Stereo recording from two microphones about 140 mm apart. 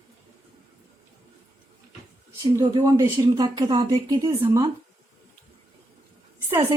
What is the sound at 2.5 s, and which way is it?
Speech, 25° right (ahead or behind).